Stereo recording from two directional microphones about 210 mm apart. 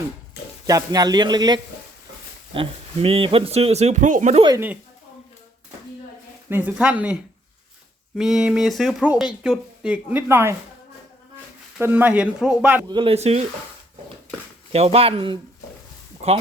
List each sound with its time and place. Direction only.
0.7 s a man's voice: 15° right (ahead or behind); by 4.4 s 35° right (ahead or behind)
4.4 s speech: 10° right (ahead or behind)
6.5 s speech: 5° right (ahead or behind)
11.8 s speech: 10° right (ahead or behind)
12.9 s a man's voice: 25° right (ahead or behind)
14.7 s a man's voice: 30° right (ahead or behind)